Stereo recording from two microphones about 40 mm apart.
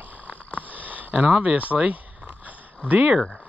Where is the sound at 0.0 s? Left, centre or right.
Right.